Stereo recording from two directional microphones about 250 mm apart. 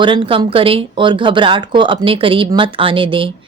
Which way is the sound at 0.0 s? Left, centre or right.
Centre.